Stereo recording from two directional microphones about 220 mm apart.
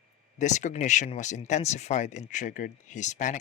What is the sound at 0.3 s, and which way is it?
Speech, 35° left (ahead or behind).